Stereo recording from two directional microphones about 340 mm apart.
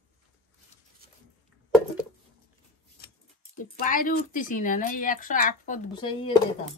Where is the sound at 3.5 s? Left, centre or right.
Left.